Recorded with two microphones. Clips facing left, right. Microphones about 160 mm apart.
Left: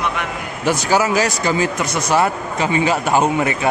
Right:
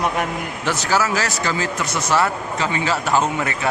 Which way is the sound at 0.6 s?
15° left (ahead or behind).